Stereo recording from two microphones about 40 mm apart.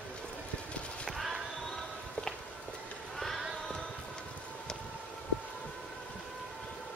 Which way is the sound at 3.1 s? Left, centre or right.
Centre.